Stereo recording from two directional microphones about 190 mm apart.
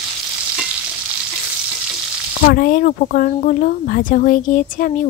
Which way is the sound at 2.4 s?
50° left (ahead or behind).